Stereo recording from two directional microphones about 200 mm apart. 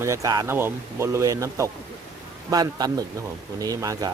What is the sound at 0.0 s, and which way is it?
Speech, 15° right (ahead or behind).